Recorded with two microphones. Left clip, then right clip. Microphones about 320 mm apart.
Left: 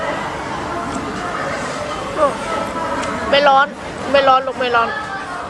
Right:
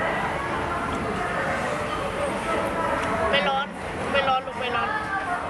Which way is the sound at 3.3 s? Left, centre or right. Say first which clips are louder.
Left 14 dB; centre.